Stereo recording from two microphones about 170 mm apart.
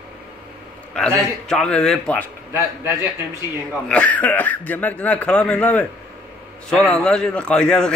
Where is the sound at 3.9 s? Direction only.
10° left (ahead or behind).